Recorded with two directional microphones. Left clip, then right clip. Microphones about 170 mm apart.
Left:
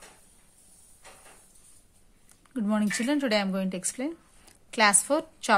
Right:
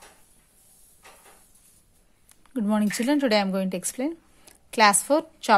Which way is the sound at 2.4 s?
25° right (ahead or behind).